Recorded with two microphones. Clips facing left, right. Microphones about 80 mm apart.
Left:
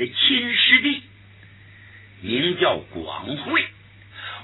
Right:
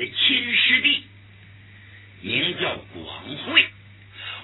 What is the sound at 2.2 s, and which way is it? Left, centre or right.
Speech, left.